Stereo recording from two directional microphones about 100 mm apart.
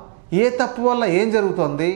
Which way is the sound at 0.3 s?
15° right (ahead or behind).